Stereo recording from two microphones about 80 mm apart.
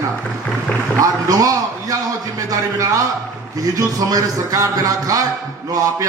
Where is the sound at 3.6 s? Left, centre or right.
Right.